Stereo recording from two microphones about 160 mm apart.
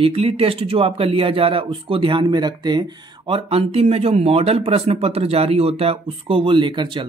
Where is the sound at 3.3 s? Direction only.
35° right (ahead or behind).